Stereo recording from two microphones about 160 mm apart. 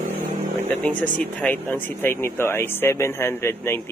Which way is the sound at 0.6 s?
10° left (ahead or behind).